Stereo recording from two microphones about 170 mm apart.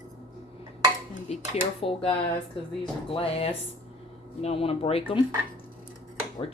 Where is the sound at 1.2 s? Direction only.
35° left (ahead or behind).